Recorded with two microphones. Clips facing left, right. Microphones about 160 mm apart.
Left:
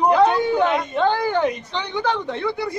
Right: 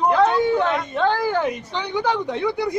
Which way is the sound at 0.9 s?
Centre (ahead or behind).